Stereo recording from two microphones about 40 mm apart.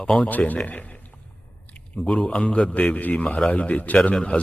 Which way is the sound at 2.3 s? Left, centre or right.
Left.